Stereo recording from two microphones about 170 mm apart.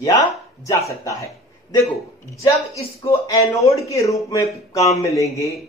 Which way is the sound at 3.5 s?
20° left (ahead or behind).